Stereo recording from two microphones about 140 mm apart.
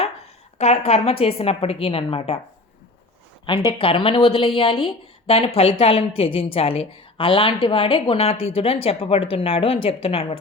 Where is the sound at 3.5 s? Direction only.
40° left (ahead or behind).